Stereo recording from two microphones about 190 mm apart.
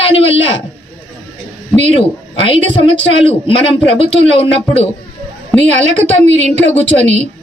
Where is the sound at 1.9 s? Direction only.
30° left (ahead or behind).